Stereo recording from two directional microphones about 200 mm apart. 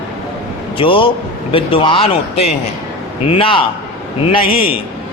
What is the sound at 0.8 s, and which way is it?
A man's voice, 25° left (ahead or behind).